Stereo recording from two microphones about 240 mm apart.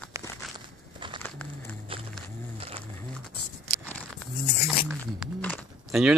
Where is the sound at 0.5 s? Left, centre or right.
Centre.